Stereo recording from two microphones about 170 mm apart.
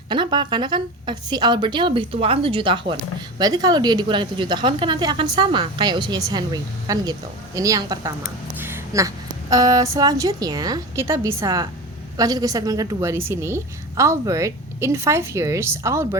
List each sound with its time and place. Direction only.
0.1 s a woman's voice: 25° right (ahead or behind)